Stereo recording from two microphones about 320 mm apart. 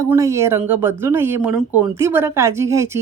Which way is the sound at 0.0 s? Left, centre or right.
Centre.